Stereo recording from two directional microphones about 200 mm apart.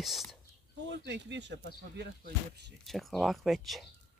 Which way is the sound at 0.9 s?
60° right (ahead or behind).